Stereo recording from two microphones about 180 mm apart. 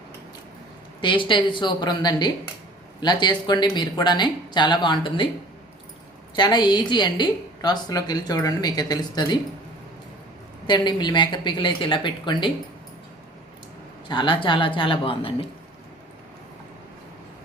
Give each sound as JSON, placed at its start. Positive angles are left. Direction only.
{"t": 1.0, "sound": "a woman's voice", "side_deg": 25}
{"t": 6.3, "sound": "a woman's voice", "side_deg": 25}
{"t": 10.7, "sound": "a woman's voice", "side_deg": 25}
{"t": 14.1, "sound": "a woman's voice", "side_deg": 25}